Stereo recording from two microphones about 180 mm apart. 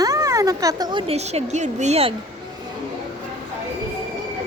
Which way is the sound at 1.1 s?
35° right (ahead or behind).